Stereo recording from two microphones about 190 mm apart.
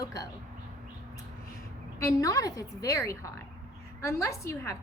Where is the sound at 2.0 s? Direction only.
20° left (ahead or behind).